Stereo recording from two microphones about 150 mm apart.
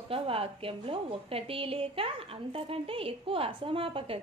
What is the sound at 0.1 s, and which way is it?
A woman's voice, 40° right (ahead or behind).